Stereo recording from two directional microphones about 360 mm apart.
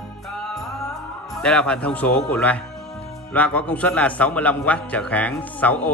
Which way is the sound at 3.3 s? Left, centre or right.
Centre.